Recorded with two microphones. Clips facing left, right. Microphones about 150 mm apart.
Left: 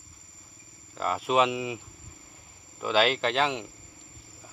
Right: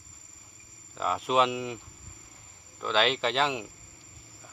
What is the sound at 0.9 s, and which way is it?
Speech, centre (ahead or behind).